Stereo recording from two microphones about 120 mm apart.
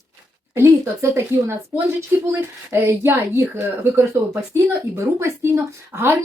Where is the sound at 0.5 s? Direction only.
20° right (ahead or behind).